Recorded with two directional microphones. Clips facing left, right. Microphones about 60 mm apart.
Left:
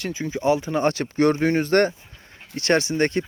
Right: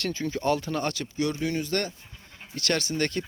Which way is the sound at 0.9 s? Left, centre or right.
Left.